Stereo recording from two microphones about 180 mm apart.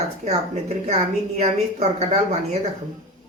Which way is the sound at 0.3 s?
35° right (ahead or behind).